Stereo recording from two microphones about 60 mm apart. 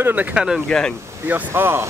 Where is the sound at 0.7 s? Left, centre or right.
Centre.